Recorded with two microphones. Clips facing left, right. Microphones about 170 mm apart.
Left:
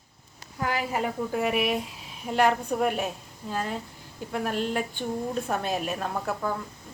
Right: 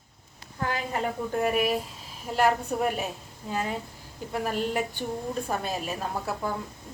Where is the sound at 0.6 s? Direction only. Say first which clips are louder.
Left 1 dB; 10° left (ahead or behind).